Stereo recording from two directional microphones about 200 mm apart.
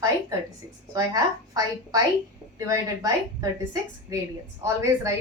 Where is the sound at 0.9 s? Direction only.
15° right (ahead or behind).